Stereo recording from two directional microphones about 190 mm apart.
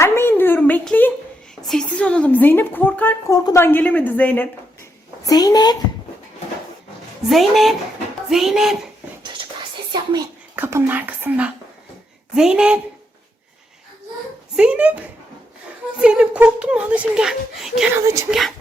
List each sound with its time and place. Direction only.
0.0 s a sound: 10° left (ahead or behind)
1.6 s a woman's voice: centre (ahead or behind)
5.2 s a woman's voice: 20° left (ahead or behind)
7.3 s a child's voice: centre (ahead or behind)
9.9 s a child's voice: 25° right (ahead or behind)
10.5 s a child's voice: 10° right (ahead or behind)
14.5 s a child's voice: 5° right (ahead or behind)
17.9 s speech: 15° right (ahead or behind)
18.3 s a child's voice: centre (ahead or behind)